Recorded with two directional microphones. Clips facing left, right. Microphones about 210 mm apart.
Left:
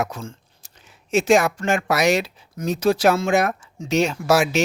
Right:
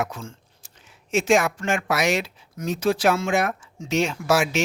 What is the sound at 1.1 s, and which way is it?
Speech, 35° left (ahead or behind).